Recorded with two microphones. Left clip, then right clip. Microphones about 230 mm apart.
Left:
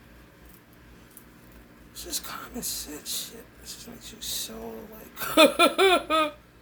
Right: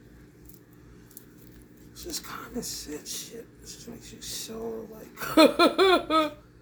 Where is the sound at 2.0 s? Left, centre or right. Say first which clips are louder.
Left 2 dB; centre.